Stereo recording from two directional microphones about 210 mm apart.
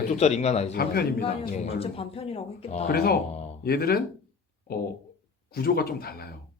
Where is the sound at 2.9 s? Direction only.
45° left (ahead or behind).